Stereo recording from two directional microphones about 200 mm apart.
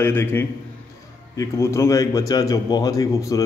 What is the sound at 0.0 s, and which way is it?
Speech, 10° left (ahead or behind).